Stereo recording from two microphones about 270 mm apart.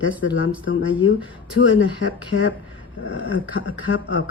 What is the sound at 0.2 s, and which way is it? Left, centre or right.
Speech, left.